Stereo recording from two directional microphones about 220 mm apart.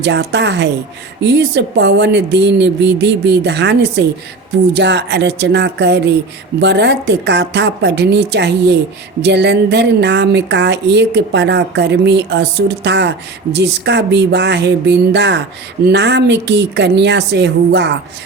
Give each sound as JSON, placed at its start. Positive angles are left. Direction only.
{"t": 0.0, "sound": "speech", "side_deg": -50}